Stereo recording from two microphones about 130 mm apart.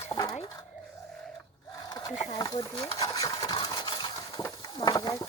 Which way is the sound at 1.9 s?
30° left (ahead or behind).